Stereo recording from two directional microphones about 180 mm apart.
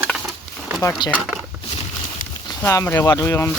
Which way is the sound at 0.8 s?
20° left (ahead or behind).